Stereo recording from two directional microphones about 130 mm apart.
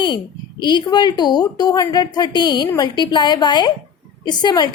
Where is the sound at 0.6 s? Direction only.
35° left (ahead or behind).